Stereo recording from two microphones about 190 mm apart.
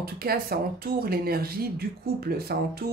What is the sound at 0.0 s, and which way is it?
Speech, 50° right (ahead or behind).